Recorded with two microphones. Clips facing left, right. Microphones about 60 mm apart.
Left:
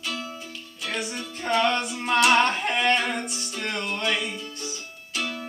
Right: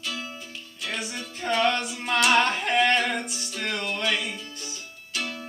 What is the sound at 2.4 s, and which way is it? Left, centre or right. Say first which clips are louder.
Singing: right 1 dB; centre.